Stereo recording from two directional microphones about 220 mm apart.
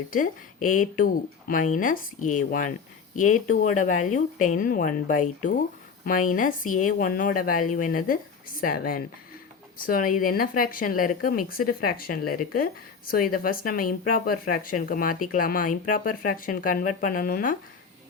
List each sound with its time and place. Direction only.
0.1 s speech: 40° left (ahead or behind)